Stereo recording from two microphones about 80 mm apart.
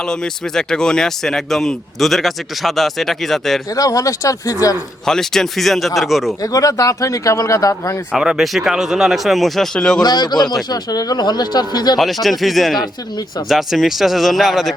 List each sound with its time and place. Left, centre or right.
0.0 s speech: centre
3.8 s speech: left
5.0 s speech: centre
6.4 s speech: left
8.1 s speech: centre
10.0 s speech: left
11.9 s speech: centre